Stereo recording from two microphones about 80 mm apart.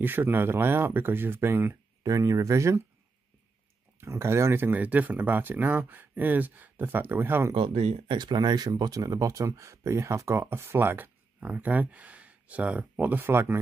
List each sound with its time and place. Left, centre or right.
0.0 s speech: right
2.0 s speech: right
4.0 s speech: right
8.1 s speech: right
11.3 s speech: centre